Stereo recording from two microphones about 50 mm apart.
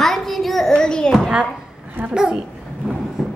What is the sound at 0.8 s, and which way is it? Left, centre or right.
Speech, centre.